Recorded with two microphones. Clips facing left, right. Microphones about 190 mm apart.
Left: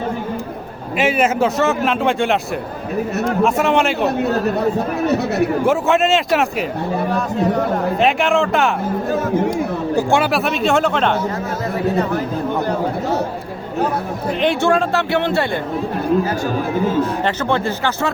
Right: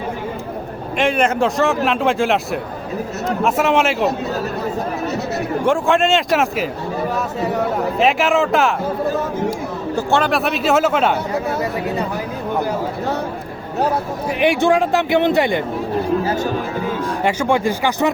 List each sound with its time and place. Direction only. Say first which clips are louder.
0.9 s a man's voice: left 1 dB; 5° left (ahead or behind)
5.0 s speech: left 5 dB; 60° left (ahead or behind)
5.6 s a man's voice: right 3 dB; 5° left (ahead or behind)
7.9 s a man's voice: right 1 dB; centre (ahead or behind)
10.1 s a man's voice: right 3 dB; 10° left (ahead or behind)
14.3 s speech: right 1 dB; 10° right (ahead or behind)
17.0 s speech: left 1 dB; 10° right (ahead or behind)